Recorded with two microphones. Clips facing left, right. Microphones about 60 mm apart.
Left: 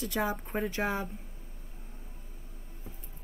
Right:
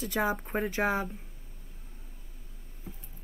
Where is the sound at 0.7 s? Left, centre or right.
Centre.